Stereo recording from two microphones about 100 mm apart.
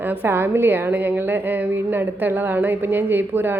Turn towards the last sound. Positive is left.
turn(degrees=-20)  # may be behind; listen again after turning